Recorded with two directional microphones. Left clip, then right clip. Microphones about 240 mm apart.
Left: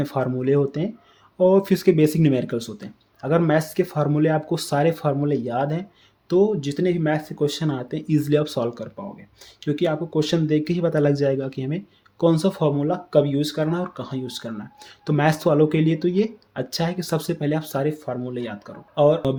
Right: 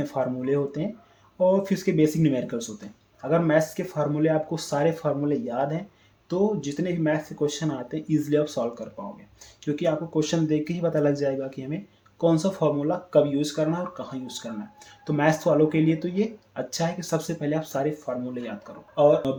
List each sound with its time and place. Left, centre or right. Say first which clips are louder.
0.0 s speech: left 3 dB; left